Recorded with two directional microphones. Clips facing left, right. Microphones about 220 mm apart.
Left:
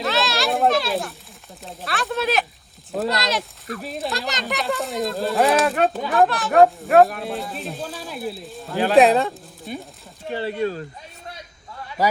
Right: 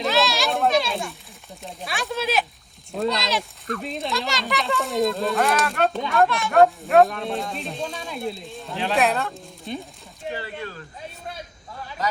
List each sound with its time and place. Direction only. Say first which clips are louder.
0.0 s children playing: right 1 dB; centre (ahead or behind)
3.0 s speech: even; centre (ahead or behind)
10.3 s speech: left 12 dB; 30° left (ahead or behind)